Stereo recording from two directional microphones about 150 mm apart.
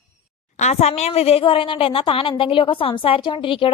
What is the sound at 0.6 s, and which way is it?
A woman's voice, 50° left (ahead or behind).